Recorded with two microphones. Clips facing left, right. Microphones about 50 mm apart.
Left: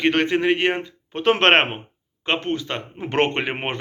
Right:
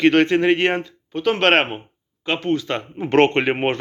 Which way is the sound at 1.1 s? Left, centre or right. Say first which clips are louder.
Left 1 dB; left.